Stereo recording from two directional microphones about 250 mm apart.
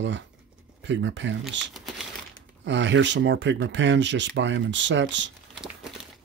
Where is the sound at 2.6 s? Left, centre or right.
Right.